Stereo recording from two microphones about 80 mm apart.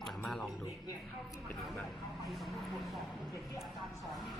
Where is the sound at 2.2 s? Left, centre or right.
Centre.